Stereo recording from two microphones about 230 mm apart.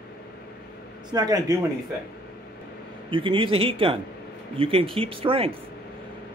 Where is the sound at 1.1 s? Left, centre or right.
Centre.